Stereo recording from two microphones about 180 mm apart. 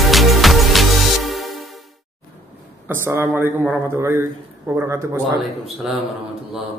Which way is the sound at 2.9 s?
15° right (ahead or behind).